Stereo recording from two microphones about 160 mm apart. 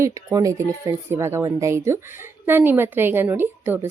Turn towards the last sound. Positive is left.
turn(degrees=-15)  # may be behind; listen again after turning